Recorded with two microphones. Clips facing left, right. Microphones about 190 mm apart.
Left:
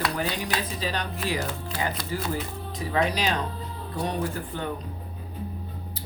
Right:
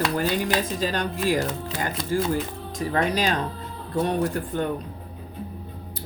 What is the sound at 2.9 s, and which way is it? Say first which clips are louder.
Speech: right 2 dB; 50° right (ahead or behind).